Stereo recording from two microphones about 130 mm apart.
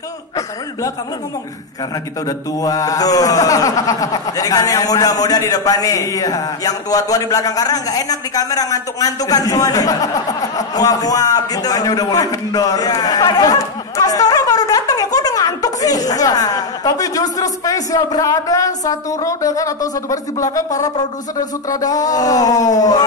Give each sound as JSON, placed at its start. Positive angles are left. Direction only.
{"t": 2.2, "sound": "speech", "side_deg": 25}